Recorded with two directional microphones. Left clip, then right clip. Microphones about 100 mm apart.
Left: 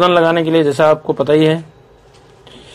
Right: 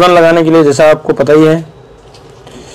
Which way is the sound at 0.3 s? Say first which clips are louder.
Right 7 dB; 25° left (ahead or behind).